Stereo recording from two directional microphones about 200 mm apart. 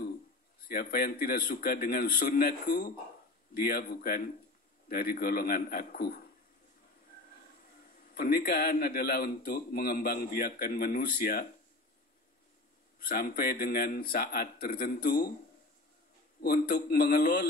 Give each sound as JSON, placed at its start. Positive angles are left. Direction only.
{"t": 0.7, "sound": "a man's voice", "side_deg": 50}
{"t": 8.0, "sound": "a man's voice", "side_deg": 50}
{"t": 13.1, "sound": "a man's voice", "side_deg": 50}
{"t": 16.4, "sound": "a man's voice", "side_deg": 50}